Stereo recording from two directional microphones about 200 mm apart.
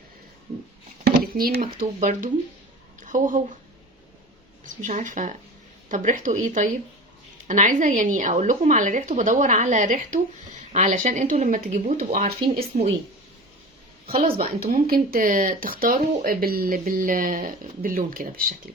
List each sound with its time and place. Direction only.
1.0 s speech: 50° right (ahead or behind)
4.6 s speech: 40° right (ahead or behind)
14.6 s speech: 45° right (ahead or behind)